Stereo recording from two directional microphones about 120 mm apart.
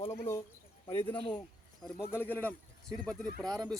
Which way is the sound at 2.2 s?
15° left (ahead or behind).